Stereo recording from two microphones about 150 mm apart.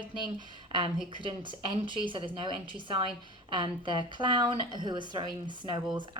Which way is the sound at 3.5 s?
30° right (ahead or behind).